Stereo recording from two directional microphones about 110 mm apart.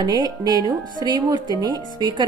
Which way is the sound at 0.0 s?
40° right (ahead or behind).